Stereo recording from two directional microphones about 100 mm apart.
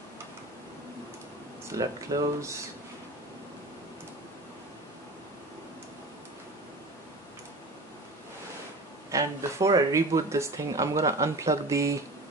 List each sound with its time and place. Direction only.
1.7 s speech: 35° right (ahead or behind)
9.1 s speech: 30° right (ahead or behind)